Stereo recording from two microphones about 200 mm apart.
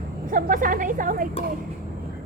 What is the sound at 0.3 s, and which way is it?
A woman's voice, 45° right (ahead or behind).